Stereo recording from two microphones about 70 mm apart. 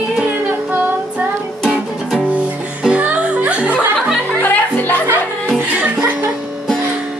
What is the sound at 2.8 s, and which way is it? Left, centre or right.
Music, centre.